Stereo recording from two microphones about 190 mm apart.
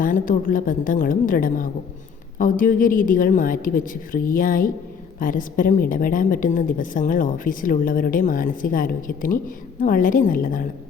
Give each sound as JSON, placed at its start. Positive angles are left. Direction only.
{"t": 0.0, "sound": "a woman's voice", "side_deg": 45}